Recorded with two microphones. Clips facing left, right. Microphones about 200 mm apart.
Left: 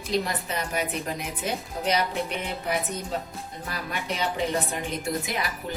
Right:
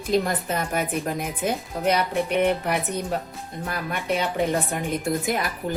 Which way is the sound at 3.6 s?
55° right (ahead or behind).